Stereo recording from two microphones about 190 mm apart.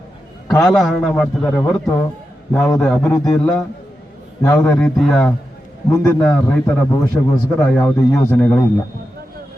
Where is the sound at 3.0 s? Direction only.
20° left (ahead or behind).